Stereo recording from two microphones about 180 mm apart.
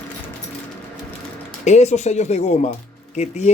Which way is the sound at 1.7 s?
40° left (ahead or behind).